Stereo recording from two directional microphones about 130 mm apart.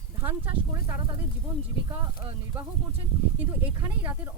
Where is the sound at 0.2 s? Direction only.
20° right (ahead or behind).